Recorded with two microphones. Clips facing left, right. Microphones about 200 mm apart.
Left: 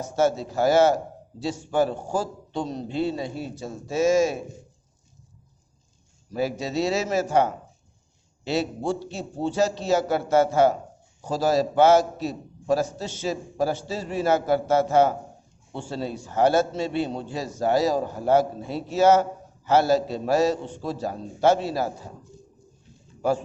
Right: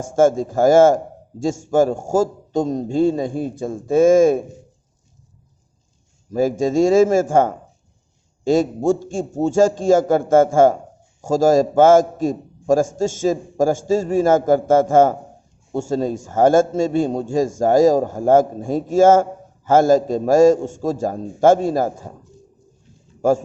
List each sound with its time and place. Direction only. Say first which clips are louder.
0.0 s a man's voice: right 7 dB; 50° right (ahead or behind)
6.3 s a man's voice: right 9 dB; 45° right (ahead or behind)
23.2 s a man's voice: right 7 dB; 45° right (ahead or behind)